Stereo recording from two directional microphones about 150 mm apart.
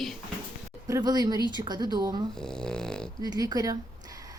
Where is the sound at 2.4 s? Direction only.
5° left (ahead or behind).